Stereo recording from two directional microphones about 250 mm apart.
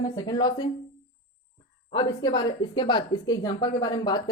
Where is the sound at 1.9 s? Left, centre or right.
Centre.